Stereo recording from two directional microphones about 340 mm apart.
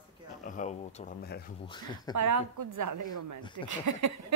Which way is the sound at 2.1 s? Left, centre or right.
Right.